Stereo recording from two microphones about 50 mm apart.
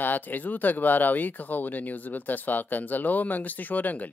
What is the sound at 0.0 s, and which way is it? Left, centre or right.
Speech, left.